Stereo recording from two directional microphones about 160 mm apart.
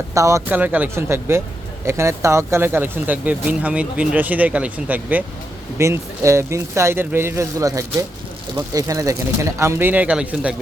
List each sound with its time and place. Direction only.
0.1 s speech: 20° right (ahead or behind)